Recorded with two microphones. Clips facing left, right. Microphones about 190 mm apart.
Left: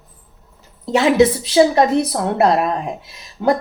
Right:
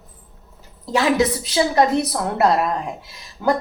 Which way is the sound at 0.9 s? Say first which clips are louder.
Left 5 dB; 25° left (ahead or behind).